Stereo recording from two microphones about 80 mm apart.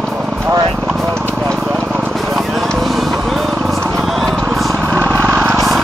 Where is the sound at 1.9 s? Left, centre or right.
Centre.